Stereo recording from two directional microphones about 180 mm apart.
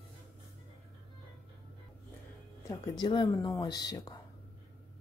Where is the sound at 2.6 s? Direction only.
25° left (ahead or behind).